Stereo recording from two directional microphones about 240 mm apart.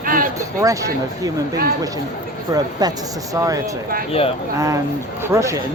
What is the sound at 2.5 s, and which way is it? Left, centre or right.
Speech, centre.